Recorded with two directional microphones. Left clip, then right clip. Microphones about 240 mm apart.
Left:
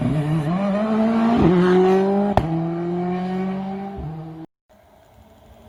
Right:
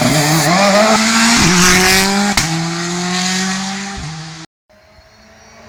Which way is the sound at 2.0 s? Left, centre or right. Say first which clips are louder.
Right 5 dB; centre.